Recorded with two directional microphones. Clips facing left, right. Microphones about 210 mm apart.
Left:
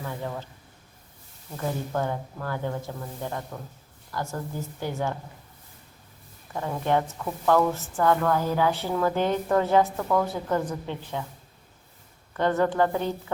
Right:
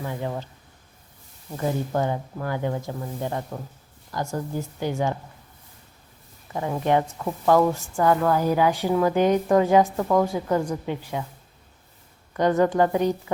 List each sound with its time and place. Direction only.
0.0 s a woman's voice: 20° right (ahead or behind)
1.9 s a woman's voice: 15° right (ahead or behind)
6.5 s a woman's voice: 15° right (ahead or behind)
12.4 s a woman's voice: 15° right (ahead or behind)